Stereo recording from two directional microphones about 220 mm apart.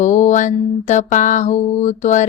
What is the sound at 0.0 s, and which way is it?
Mantra, 35° left (ahead or behind).